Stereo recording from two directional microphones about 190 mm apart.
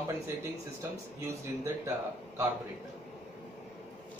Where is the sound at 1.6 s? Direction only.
15° right (ahead or behind).